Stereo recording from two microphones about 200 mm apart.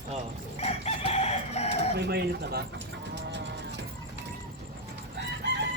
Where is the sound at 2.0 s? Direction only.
55° right (ahead or behind).